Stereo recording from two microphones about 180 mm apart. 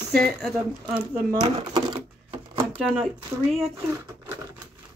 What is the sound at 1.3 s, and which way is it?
Speech, 20° right (ahead or behind).